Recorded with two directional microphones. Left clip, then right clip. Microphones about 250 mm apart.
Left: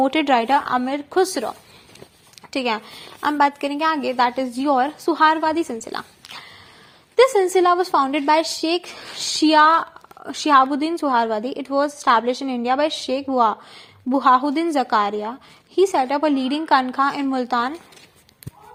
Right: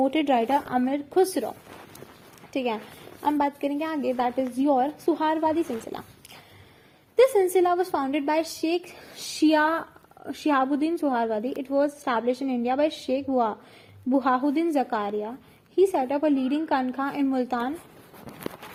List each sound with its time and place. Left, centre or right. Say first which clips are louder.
0.0 s a woman's voice: left 5 dB; left
2.5 s a woman's voice: left 5 dB; left
5.9 s a sound: left 7 dB; centre
7.2 s a woman's voice: left 4 dB; centre